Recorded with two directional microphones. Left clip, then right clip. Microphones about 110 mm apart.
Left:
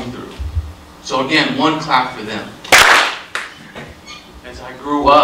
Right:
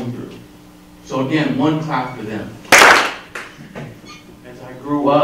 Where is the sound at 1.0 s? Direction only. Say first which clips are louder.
Left 4 dB; 35° left (ahead or behind).